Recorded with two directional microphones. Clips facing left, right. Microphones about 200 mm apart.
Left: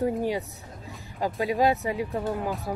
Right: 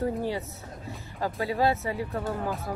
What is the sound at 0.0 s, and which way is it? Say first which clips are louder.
Speech: left 3 dB; 15° left (ahead or behind).